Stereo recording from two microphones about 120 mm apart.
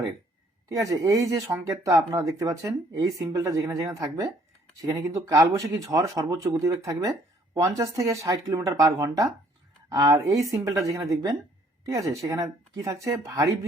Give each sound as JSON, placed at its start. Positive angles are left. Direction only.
{"t": 0.7, "sound": "speech", "side_deg": -30}